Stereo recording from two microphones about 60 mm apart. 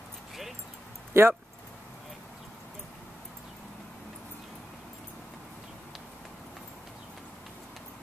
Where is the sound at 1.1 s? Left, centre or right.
Right.